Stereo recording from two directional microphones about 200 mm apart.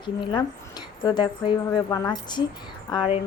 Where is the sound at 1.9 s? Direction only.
20° left (ahead or behind).